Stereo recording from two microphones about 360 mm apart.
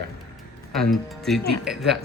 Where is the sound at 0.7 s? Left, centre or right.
Centre.